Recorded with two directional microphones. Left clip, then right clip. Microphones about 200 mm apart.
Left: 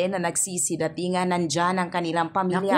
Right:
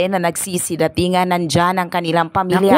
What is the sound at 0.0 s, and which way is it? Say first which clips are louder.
A woman's voice: right 8 dB; 45° right (ahead or behind).